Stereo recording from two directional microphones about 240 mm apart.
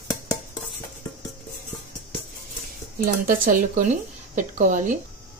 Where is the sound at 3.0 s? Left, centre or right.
Right.